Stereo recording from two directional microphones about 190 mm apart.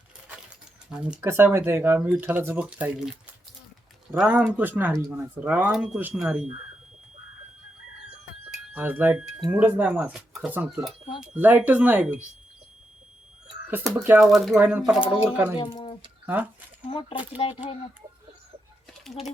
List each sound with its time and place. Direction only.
0.9 s speech: 5° right (ahead or behind)
8.7 s speech: 10° right (ahead or behind)
13.7 s speech: 15° right (ahead or behind)
14.2 s speech: centre (ahead or behind)
15.5 s speech: 25° left (ahead or behind)
16.2 s speech: 10° right (ahead or behind)
16.9 s speech: 25° left (ahead or behind)